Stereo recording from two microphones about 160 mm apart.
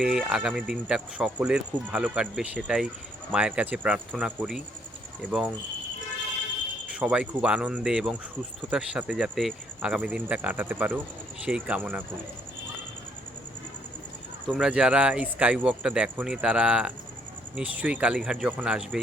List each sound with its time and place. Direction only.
0.0 s speech: 5° right (ahead or behind)
6.8 s speech: 5° right (ahead or behind)
14.4 s speech: 5° right (ahead or behind)